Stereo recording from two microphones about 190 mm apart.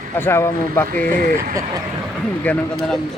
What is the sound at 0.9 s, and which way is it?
Speech, 45° right (ahead or behind).